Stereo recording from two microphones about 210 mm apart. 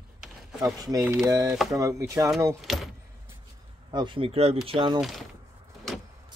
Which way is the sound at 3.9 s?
20° right (ahead or behind).